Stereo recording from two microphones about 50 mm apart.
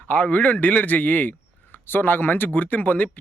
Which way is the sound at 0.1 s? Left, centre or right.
Left.